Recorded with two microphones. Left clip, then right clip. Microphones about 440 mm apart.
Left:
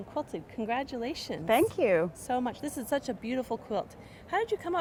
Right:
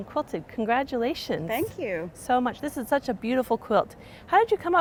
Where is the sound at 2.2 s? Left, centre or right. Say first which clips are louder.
Right 7 dB; right.